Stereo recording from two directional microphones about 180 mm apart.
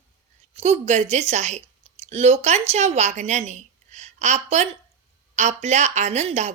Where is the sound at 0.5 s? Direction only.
35° right (ahead or behind).